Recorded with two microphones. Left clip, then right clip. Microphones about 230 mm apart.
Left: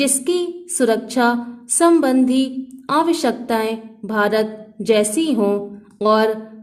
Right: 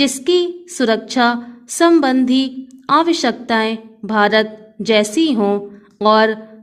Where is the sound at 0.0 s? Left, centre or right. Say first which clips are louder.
Right 4 dB; right.